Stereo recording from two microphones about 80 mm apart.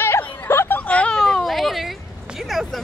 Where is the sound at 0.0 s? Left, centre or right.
Left; by 1.1 s centre.